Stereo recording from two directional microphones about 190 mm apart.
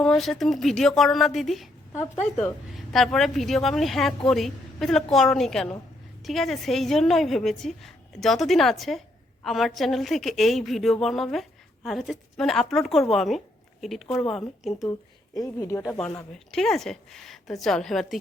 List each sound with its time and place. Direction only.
0.0 s a woman's voice: centre (ahead or behind)
2.7 s a woman's voice: centre (ahead or behind)
15.4 s a woman's voice: 15° left (ahead or behind)